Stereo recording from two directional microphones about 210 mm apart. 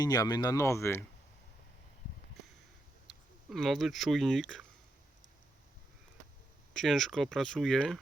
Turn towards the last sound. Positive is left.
turn(degrees=0)  # may be behind; listen again after turning